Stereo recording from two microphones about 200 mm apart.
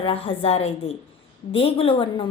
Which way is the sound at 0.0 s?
25° left (ahead or behind).